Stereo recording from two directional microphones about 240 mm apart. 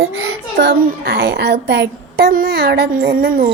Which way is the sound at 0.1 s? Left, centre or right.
Right.